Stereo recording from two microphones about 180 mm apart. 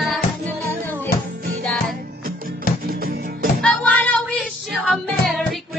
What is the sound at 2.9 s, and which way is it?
Music, 55° right (ahead or behind).